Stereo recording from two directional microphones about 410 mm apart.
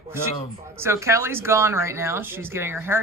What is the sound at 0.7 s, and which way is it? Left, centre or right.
Speech, centre.